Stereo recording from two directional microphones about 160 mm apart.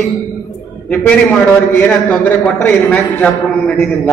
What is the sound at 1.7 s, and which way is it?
A man's voice, 10° left (ahead or behind).